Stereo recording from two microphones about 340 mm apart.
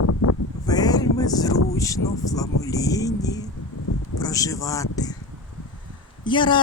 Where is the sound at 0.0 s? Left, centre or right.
Left.